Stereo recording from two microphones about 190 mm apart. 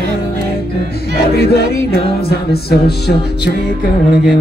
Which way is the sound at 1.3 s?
55° left (ahead or behind).